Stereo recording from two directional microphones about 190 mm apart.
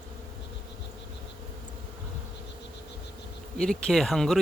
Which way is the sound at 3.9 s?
Centre (ahead or behind).